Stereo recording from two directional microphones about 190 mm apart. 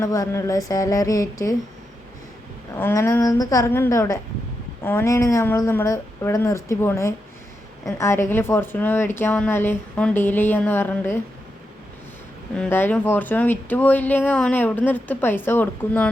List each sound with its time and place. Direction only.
0.0 s speech: 15° left (ahead or behind)
2.7 s speech: 10° left (ahead or behind)
12.5 s speech: 10° left (ahead or behind)